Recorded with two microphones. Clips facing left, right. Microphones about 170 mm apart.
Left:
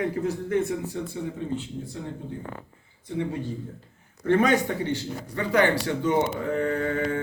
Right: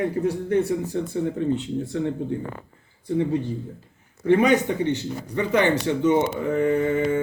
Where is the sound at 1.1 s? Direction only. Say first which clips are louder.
Right 7 dB; 60° right (ahead or behind).